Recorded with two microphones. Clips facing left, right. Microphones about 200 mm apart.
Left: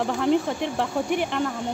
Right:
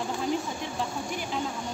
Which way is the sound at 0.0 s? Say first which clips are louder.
Left 7 dB; 65° left (ahead or behind).